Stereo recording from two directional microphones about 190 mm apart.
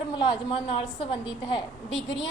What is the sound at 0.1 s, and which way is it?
Speech, 25° left (ahead or behind).